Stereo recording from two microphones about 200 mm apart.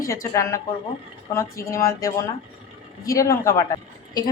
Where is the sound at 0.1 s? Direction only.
15° left (ahead or behind).